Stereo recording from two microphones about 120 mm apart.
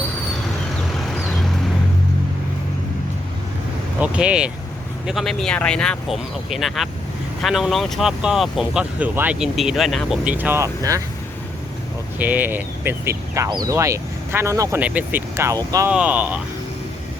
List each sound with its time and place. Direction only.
1.0 s vehicle: 5° left (ahead or behind)
4.0 s speech: 10° right (ahead or behind)
9.4 s speech: 5° right (ahead or behind)
10.2 s speech: 15° right (ahead or behind)
10.6 s speech: 25° right (ahead or behind)
12.2 s speech: 15° right (ahead or behind)
13.5 s speech: 35° right (ahead or behind)
13.7 s speech: 25° right (ahead or behind)
14.8 s speech: 10° right (ahead or behind)
15.9 s speech: 10° right (ahead or behind)